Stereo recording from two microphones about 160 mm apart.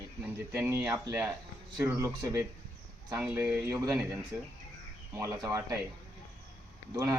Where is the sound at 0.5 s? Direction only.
10° right (ahead or behind).